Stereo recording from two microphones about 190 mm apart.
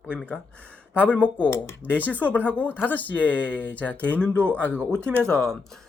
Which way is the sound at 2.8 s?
10° left (ahead or behind).